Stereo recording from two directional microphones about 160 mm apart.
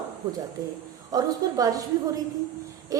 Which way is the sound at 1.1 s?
20° right (ahead or behind).